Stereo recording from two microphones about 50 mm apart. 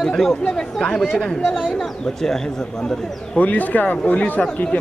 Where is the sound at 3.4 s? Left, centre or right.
Left.